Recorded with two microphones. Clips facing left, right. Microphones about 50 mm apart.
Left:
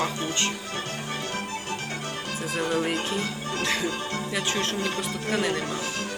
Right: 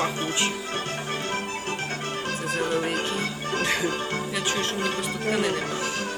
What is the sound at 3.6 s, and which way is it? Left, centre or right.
Speech, right.